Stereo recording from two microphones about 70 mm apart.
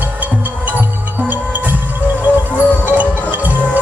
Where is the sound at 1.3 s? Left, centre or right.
Right.